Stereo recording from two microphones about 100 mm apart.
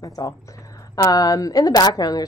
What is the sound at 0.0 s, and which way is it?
Speech, 35° left (ahead or behind).